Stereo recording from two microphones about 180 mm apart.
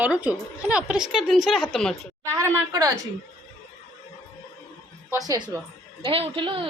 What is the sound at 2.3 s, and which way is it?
Speech, 15° right (ahead or behind).